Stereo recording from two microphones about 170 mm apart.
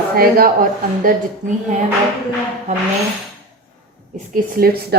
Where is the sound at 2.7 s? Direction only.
40° right (ahead or behind).